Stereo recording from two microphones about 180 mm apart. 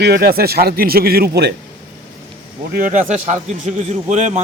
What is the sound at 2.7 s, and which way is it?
A man's voice, 50° right (ahead or behind).